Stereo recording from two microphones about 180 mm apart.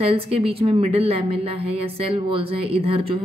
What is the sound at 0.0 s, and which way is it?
A woman's voice, 30° right (ahead or behind).